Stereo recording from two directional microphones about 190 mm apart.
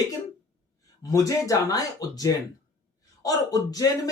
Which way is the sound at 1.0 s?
15° left (ahead or behind).